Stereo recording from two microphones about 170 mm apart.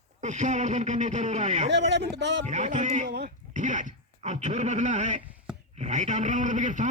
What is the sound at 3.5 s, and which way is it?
A man's voice, 45° right (ahead or behind).